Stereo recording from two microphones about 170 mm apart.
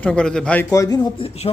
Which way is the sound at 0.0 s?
5° left (ahead or behind).